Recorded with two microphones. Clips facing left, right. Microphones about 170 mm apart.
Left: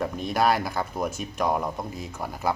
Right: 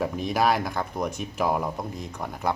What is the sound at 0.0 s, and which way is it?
Speech, centre (ahead or behind).